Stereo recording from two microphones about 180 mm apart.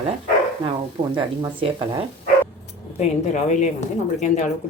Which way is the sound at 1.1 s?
25° right (ahead or behind).